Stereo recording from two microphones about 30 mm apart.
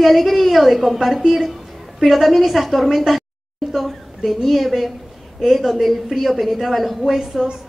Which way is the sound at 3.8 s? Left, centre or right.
Centre.